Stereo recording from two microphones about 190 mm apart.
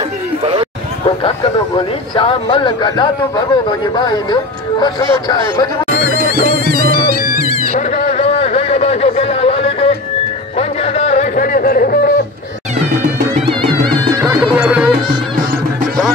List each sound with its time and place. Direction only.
1.0 s speech: 25° left (ahead or behind)
6.1 s music: 55° right (ahead or behind)
7.3 s bleat: 50° right (ahead or behind)
7.9 s a sound: 35° left (ahead or behind); by 12.1 s 50° left (ahead or behind)
13.8 s music: 15° right (ahead or behind)